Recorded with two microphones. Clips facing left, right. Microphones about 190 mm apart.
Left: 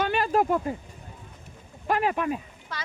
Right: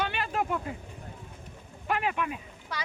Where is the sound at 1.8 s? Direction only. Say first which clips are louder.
Left 5 dB; 40° left (ahead or behind).